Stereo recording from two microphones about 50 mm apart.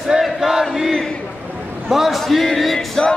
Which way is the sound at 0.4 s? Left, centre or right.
Centre.